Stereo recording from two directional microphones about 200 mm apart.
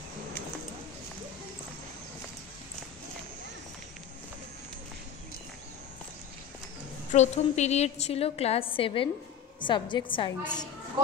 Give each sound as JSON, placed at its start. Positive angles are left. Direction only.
{"t": 7.1, "sound": "a woman's voice", "side_deg": 35}